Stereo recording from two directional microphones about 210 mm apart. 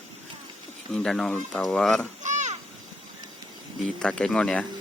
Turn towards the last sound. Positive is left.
turn(degrees=5)  # may be behind; listen again after turning